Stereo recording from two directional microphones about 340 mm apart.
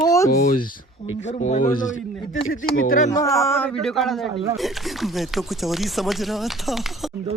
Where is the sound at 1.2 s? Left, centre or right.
Centre.